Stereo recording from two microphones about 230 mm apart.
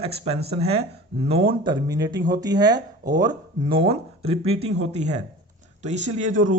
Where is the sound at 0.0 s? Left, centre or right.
Right.